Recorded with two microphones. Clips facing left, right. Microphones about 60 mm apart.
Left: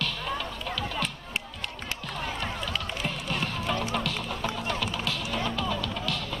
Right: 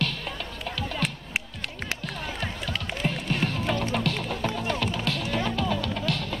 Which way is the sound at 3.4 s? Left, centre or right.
Right.